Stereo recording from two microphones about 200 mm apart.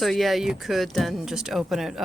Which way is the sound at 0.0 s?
Centre (ahead or behind).